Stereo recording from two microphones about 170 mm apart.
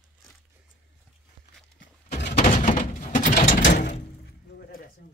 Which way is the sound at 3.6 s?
85° left.